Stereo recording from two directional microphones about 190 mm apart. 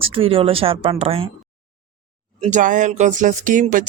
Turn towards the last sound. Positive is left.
turn(degrees=-45)  # may be behind; listen again after turning